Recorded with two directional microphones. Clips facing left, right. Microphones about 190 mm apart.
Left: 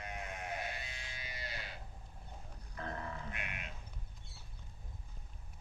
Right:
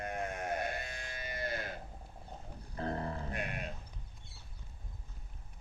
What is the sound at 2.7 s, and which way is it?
Grunt, 35° right (ahead or behind).